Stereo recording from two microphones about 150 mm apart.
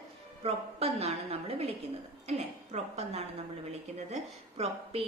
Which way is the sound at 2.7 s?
45° right (ahead or behind).